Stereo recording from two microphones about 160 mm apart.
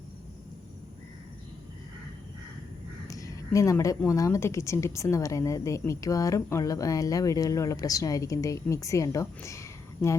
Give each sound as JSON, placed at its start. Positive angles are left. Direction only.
{"t": 3.1, "sound": "a woman's voice", "side_deg": 20}